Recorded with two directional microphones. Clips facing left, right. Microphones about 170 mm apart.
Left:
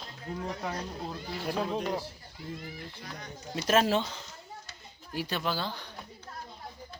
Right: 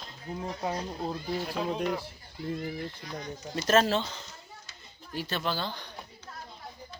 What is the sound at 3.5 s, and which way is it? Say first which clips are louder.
Speech: right 1 dB; 10° left (ahead or behind).